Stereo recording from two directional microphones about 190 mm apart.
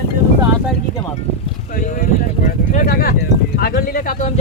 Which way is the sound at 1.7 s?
40° left (ahead or behind).